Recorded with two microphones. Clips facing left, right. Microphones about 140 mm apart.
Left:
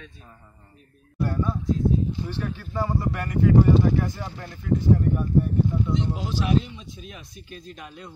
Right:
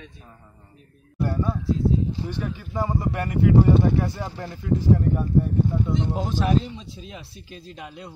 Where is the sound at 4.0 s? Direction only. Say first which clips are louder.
Right 2 dB; 35° right (ahead or behind).